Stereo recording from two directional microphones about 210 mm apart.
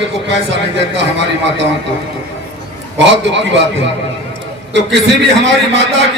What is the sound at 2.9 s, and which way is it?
Speech, 55° right (ahead or behind).